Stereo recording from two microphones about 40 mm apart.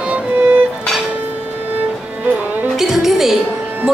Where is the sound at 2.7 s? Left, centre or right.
Centre.